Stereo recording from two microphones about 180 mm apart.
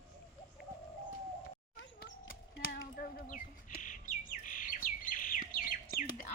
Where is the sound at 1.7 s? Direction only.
85° left.